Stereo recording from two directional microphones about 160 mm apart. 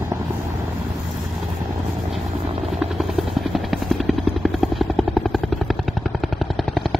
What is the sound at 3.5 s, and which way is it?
Vehicle, centre (ahead or behind).